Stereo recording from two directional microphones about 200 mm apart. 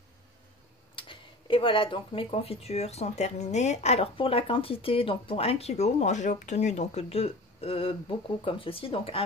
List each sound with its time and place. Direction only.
0.9 s speech: 25° left (ahead or behind)